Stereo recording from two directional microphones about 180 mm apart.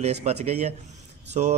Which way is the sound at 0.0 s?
40° right (ahead or behind).